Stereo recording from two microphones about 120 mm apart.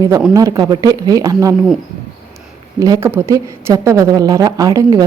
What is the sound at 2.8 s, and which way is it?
A woman's voice, 30° right (ahead or behind).